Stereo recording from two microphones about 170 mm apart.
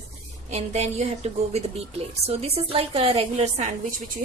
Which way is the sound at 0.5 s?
40° right (ahead or behind).